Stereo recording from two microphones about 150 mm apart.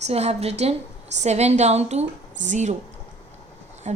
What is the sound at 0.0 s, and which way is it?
A woman's voice, 45° right (ahead or behind).